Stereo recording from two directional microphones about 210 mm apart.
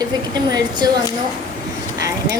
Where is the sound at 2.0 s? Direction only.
15° right (ahead or behind).